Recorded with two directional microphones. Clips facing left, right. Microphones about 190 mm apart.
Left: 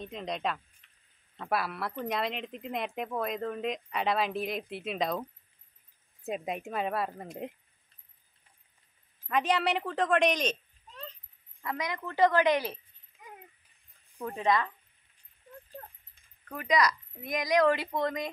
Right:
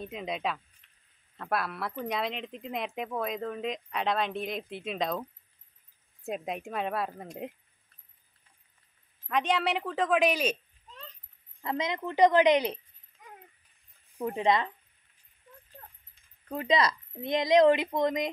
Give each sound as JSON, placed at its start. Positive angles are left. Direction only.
{"t": 0.0, "sound": "speech", "side_deg": -5}
{"t": 6.2, "sound": "speech", "side_deg": 0}
{"t": 9.3, "sound": "speech", "side_deg": 0}
{"t": 11.6, "sound": "a woman's voice", "side_deg": -25}
{"t": 13.1, "sound": "a sound", "side_deg": 5}
{"t": 14.1, "sound": "a woman's voice", "side_deg": -20}
{"t": 16.4, "sound": "a woman's voice", "side_deg": -25}